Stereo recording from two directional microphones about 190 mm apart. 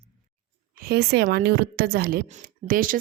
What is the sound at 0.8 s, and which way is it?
Speech, 55° right (ahead or behind).